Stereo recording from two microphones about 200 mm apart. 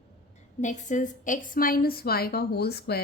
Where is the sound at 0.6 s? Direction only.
35° left (ahead or behind).